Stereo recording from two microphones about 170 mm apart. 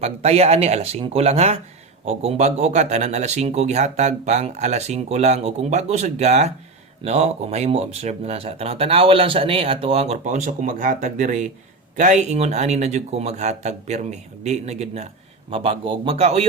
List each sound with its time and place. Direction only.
0.0 s speech: 40° right (ahead or behind)